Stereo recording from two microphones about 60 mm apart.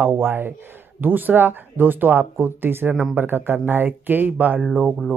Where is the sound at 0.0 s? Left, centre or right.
Right.